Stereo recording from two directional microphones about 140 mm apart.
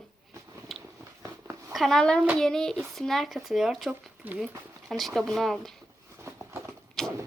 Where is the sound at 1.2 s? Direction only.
20° right (ahead or behind).